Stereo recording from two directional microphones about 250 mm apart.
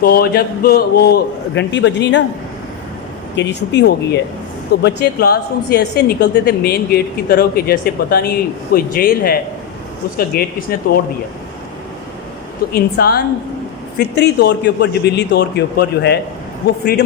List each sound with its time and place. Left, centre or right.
0.0 s a woman's voice: left
3.3 s a woman's voice: left
12.7 s a woman's voice: left